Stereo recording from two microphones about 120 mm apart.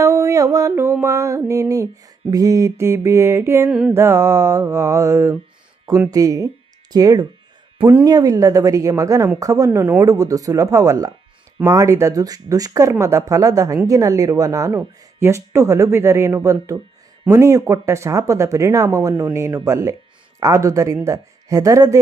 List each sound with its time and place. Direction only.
0.0 s speech: 25° right (ahead or behind)
3.7 s music: 5° right (ahead or behind)
3.9 s speech: 20° right (ahead or behind)
9.6 s speech: 15° right (ahead or behind)
10.0 s speech: 30° right (ahead or behind)